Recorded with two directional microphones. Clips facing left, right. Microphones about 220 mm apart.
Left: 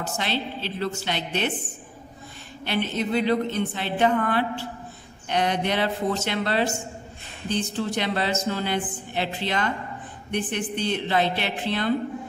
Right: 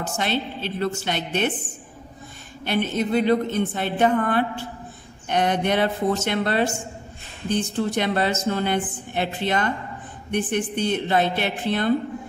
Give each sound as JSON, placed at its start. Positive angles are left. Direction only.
{"t": 0.2, "sound": "a woman's voice", "side_deg": -50}
{"t": 2.6, "sound": "a woman's voice", "side_deg": -50}